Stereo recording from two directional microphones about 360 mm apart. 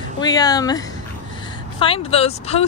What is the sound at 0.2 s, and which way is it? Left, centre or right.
Speech, centre.